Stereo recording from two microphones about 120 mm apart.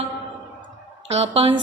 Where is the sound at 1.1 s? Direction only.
60° right (ahead or behind).